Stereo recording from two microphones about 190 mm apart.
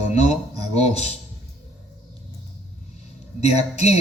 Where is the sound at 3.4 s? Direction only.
35° left (ahead or behind).